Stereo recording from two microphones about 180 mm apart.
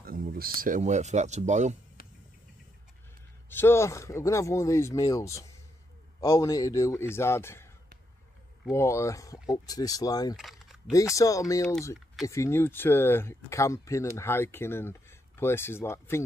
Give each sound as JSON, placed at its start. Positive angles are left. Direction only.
{"t": 0.0, "sound": "speech", "side_deg": -55}
{"t": 3.4, "sound": "speech", "side_deg": 10}
{"t": 8.7, "sound": "speech", "side_deg": 15}
{"t": 10.3, "sound": "a sound", "side_deg": 0}
{"t": 11.1, "sound": "speech", "side_deg": 20}